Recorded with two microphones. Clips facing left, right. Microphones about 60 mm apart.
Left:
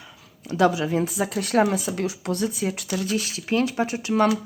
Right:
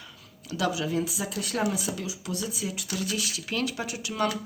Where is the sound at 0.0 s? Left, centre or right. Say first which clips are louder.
Left 2 dB; centre.